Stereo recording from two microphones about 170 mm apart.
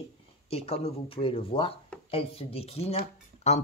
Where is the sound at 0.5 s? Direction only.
35° left (ahead or behind).